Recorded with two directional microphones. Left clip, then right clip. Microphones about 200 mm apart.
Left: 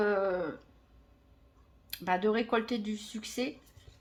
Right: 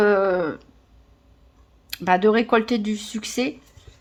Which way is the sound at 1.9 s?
40° right (ahead or behind).